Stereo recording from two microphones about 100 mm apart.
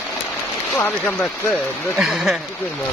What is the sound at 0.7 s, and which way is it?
Speech, 20° left (ahead or behind).